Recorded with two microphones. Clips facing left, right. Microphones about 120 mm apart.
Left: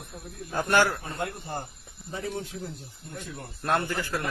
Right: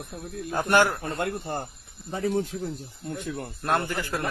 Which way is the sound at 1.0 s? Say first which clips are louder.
Right 4 dB; 65° right (ahead or behind).